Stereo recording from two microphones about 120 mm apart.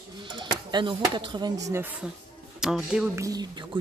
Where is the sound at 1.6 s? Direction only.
20° right (ahead or behind).